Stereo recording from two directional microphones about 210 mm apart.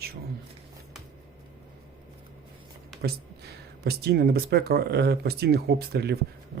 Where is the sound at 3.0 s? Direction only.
50° right (ahead or behind).